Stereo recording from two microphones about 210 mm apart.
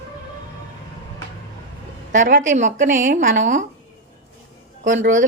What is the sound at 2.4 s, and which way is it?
A woman's voice, 35° right (ahead or behind).